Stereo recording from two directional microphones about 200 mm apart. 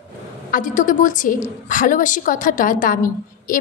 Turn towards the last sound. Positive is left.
turn(degrees=40)  # may be behind; listen again after turning